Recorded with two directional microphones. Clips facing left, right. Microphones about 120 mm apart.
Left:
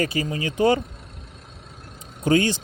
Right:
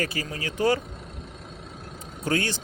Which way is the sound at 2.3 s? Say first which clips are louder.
Left 7 dB; 20° left (ahead or behind).